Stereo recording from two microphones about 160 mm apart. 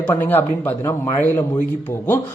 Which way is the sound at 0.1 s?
10° left (ahead or behind).